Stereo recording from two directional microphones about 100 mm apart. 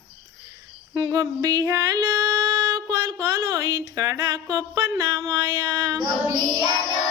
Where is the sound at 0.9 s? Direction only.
40° right (ahead or behind).